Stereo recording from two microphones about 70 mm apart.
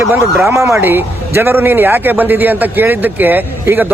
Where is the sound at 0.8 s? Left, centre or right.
Right.